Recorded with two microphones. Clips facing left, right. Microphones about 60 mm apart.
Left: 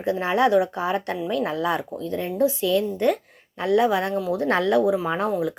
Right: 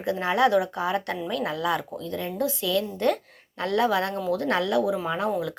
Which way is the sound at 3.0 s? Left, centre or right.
Centre.